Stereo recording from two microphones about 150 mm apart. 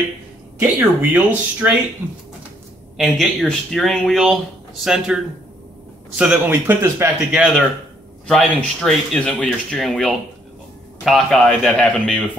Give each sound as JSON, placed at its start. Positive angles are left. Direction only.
{"t": 0.6, "sound": "speech", "side_deg": -10}
{"t": 3.0, "sound": "speech", "side_deg": 0}
{"t": 8.3, "sound": "speech", "side_deg": 5}